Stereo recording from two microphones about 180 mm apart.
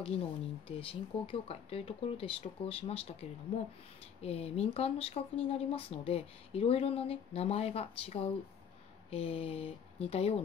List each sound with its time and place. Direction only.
0.7 s speech: 30° left (ahead or behind)